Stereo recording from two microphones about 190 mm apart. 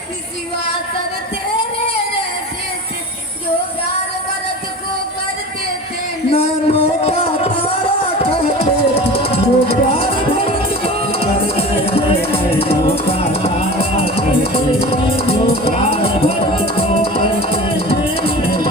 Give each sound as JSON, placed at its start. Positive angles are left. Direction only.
{"t": 6.3, "sound": "music", "side_deg": 30}